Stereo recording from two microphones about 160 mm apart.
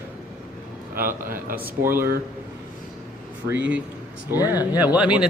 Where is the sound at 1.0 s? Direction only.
60° right (ahead or behind).